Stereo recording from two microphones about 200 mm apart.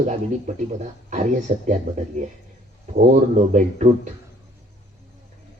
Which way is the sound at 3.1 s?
35° right (ahead or behind).